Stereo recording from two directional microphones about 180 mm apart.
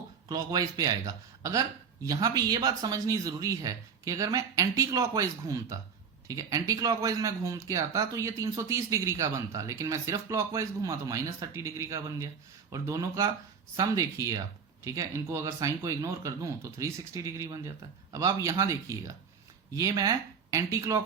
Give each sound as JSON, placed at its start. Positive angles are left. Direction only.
{"t": 0.3, "sound": "speech", "side_deg": -20}